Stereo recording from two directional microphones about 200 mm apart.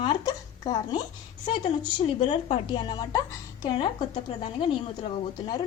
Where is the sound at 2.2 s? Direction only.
25° left (ahead or behind).